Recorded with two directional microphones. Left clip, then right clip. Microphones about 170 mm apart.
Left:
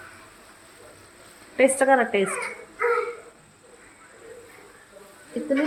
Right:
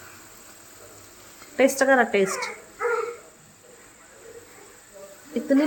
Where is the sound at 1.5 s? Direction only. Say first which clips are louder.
Even; 5° right (ahead or behind).